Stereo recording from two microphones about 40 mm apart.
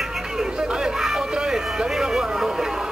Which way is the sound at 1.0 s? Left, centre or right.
Centre.